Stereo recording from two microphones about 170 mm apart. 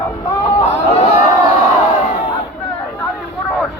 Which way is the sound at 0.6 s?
40° left (ahead or behind).